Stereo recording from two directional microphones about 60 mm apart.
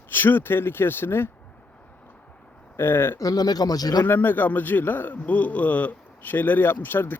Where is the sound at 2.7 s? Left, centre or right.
Left.